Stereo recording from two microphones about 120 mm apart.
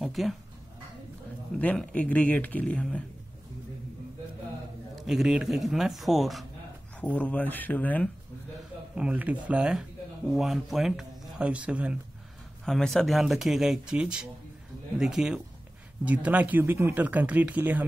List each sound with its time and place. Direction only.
0.0 s speech: centre (ahead or behind)
1.6 s speech: 10° left (ahead or behind)
4.9 s speech: 5° right (ahead or behind)
7.0 s speech: 10° left (ahead or behind)
8.9 s speech: 10° right (ahead or behind)
12.6 s speech: 5° left (ahead or behind); by 17.8 s 15° right (ahead or behind)